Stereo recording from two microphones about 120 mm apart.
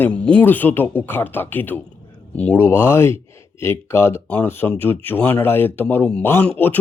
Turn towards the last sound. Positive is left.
turn(degrees=15)  # may be behind; listen again after turning